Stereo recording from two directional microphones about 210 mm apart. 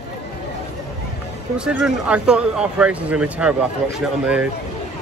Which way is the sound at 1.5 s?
5° right (ahead or behind).